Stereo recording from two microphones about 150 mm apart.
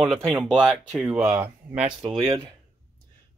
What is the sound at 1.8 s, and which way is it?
Speech, 35° right (ahead or behind).